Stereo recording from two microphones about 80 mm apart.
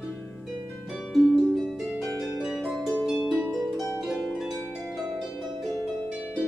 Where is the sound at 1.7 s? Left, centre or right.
Centre.